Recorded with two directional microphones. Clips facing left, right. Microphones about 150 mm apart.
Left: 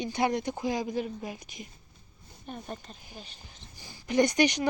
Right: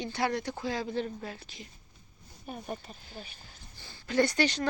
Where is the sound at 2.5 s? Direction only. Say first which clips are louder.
Right 1 dB; 10° right (ahead or behind).